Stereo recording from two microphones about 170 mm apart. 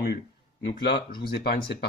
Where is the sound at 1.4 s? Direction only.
70° left (ahead or behind).